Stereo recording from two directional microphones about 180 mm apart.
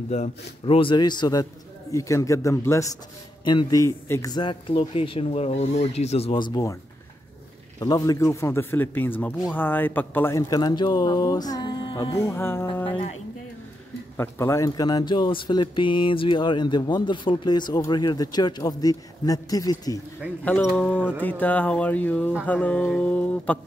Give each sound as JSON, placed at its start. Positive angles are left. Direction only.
{"t": 0.1, "sound": "speech", "side_deg": 35}
{"t": 7.8, "sound": "a man's voice", "side_deg": 20}
{"t": 14.1, "sound": "speech", "side_deg": 15}
{"t": 20.4, "sound": "a man's voice", "side_deg": 10}